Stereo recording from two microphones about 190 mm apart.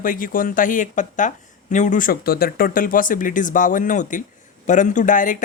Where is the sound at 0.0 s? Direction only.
45° left (ahead or behind).